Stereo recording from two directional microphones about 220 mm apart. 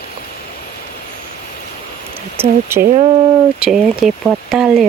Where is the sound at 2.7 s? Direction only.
10° right (ahead or behind).